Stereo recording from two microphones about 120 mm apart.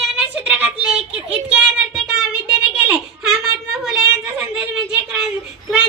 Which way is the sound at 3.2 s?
Centre (ahead or behind).